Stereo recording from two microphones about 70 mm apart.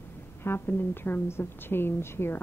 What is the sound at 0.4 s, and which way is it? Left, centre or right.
A woman's voice, left.